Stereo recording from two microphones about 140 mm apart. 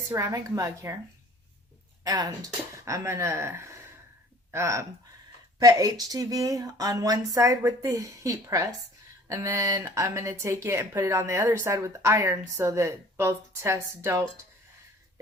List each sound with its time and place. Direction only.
0.1 s speech: 20° right (ahead or behind)
2.0 s speech: 25° right (ahead or behind)